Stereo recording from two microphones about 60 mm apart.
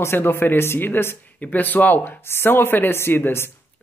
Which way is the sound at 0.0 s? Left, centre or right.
Left.